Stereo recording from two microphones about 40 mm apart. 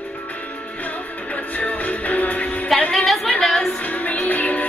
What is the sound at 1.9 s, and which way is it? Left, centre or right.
Music, left.